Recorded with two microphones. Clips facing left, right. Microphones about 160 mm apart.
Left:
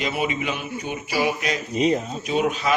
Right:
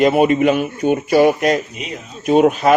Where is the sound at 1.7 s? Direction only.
35° left (ahead or behind).